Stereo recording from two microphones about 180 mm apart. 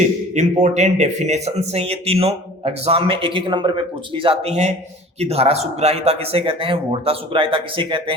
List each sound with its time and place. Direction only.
0.3 s speech: 40° right (ahead or behind)